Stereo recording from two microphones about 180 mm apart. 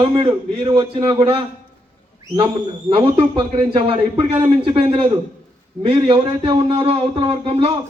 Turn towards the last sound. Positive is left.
turn(degrees=-30)  # may be behind; listen again after turning